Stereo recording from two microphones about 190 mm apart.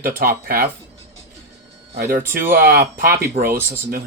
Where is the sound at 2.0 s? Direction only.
50° right (ahead or behind).